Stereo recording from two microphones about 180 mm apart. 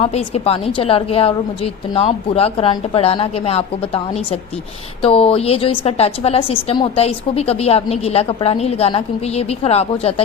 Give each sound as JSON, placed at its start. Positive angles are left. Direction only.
{"t": 0.0, "sound": "a woman's voice", "side_deg": 35}